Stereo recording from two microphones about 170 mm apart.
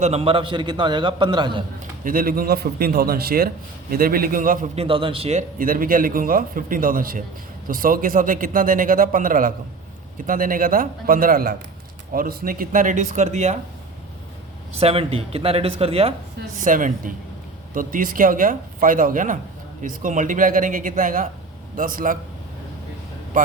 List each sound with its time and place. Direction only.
0.0 s a man's voice: 35° right (ahead or behind)
1.8 s a man's voice: 55° right (ahead or behind)
4.7 s a man's voice: 35° right (ahead or behind)
14.8 s speech: 35° right (ahead or behind)
16.6 s a man's voice: 50° right (ahead or behind)